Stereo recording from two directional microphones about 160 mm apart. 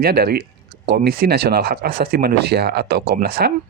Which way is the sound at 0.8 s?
90° right.